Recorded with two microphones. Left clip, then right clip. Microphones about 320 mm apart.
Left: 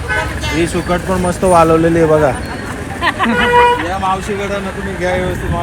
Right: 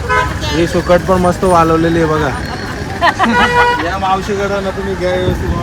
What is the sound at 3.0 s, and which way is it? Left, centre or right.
Vehicle, right.